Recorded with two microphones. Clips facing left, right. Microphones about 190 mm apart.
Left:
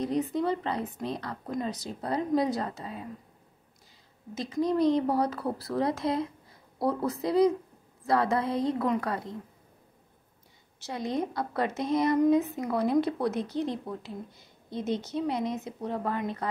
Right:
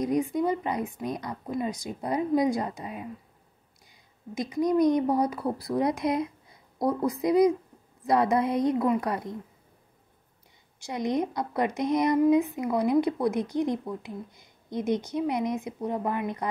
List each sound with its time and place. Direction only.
0.0 s a woman's voice: 10° right (ahead or behind)
4.4 s a woman's voice: 15° right (ahead or behind)
10.8 s a woman's voice: 15° right (ahead or behind)